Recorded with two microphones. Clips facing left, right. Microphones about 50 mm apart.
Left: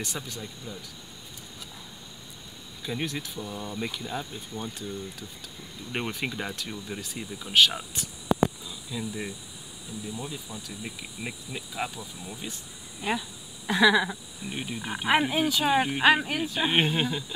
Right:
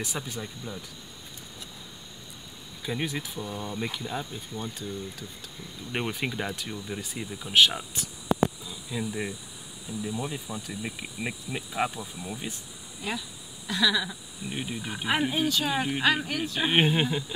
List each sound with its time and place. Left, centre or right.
0.0 s speech: centre
0.7 s speech: right
2.8 s speech: centre
8.9 s speech: centre
13.0 s a sound: left
14.5 s speech: centre
16.5 s speech: centre